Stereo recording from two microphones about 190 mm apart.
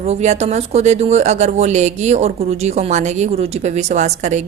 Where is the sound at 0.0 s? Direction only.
35° right (ahead or behind).